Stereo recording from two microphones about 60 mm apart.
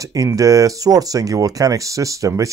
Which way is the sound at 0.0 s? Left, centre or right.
Right.